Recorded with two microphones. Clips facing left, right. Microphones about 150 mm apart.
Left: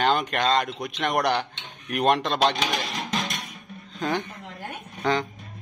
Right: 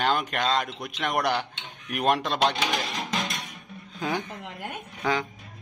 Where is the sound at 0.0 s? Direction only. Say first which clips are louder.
Left 3 dB; centre (ahead or behind).